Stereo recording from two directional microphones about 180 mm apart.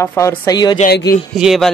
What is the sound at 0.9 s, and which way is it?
Speech, 65° left (ahead or behind).